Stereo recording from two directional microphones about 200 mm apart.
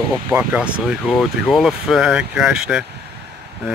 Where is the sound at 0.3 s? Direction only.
5° right (ahead or behind).